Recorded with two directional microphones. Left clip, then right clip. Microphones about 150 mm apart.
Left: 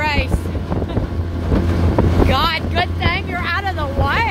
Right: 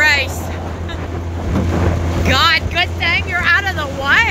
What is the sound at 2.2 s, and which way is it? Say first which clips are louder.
Vehicle: right 7 dB; 15° left (ahead or behind).